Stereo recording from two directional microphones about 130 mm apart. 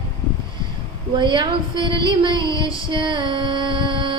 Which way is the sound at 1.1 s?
35° right (ahead or behind).